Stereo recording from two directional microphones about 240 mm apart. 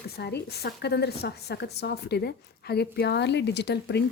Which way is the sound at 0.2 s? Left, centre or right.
Left.